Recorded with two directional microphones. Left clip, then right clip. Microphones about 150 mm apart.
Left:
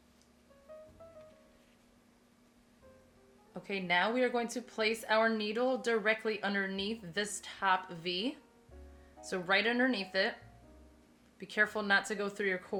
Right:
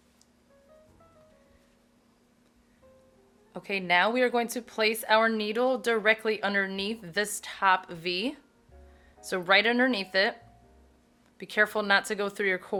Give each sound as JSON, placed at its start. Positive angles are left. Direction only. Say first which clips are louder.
{"t": 3.5, "sound": "speech", "louder": "right 7 dB", "side_deg": -30}
{"t": 11.3, "sound": "speech", "louder": "right 6 dB", "side_deg": -30}